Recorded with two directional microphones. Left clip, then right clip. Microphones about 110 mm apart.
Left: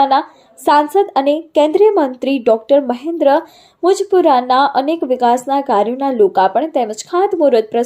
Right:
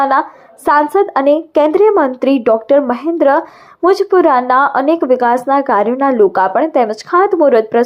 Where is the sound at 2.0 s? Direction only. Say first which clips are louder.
Right 5 dB; 50° right (ahead or behind).